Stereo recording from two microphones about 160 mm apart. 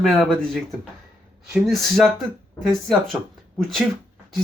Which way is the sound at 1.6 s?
Centre (ahead or behind).